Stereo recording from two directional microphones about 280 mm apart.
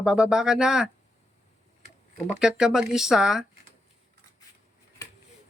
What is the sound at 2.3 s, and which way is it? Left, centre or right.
Speech, centre.